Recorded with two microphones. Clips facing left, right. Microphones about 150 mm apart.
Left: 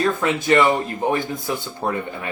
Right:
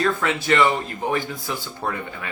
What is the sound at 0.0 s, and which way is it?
Speech, 20° left (ahead or behind).